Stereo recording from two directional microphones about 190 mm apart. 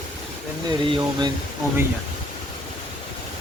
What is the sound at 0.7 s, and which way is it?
Speech, 20° right (ahead or behind).